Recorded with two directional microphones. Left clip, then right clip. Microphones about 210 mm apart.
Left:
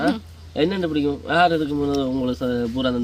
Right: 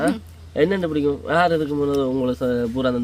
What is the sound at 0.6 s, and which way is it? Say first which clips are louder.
Speech: right 2 dB; 30° right (ahead or behind).